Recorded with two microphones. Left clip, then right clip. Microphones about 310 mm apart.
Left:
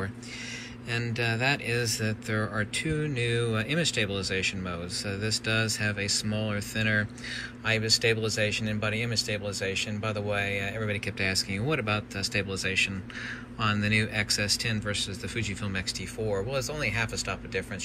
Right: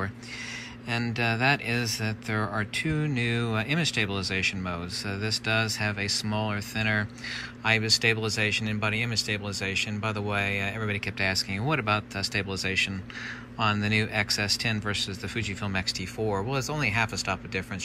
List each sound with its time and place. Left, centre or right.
0.8 s speech: centre